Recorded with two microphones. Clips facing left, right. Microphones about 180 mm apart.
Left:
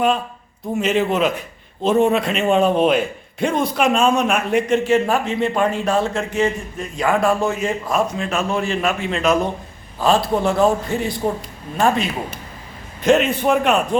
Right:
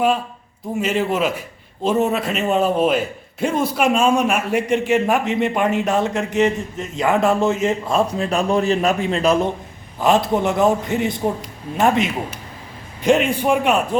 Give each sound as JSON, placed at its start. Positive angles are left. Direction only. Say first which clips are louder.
{"t": 0.8, "sound": "a man's voice", "louder": "left 2 dB", "side_deg": -5}
{"t": 10.0, "sound": "a man's voice", "louder": "even", "side_deg": -20}